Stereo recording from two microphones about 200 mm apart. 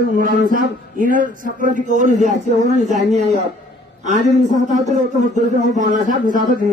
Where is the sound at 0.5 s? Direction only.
40° right (ahead or behind).